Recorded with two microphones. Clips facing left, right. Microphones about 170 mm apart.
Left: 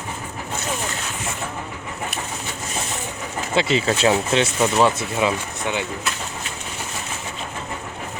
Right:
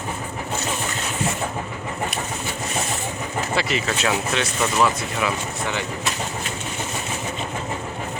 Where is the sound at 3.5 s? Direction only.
25° left (ahead or behind).